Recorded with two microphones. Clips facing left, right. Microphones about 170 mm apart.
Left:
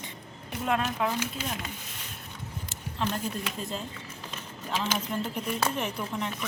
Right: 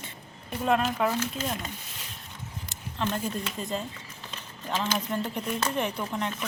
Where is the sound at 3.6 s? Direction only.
Centre (ahead or behind).